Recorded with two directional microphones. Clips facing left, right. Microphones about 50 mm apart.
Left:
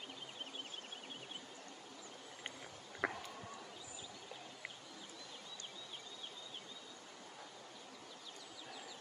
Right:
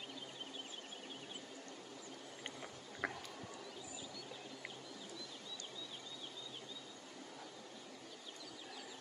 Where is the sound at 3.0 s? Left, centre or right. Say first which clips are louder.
Left 3 dB; centre.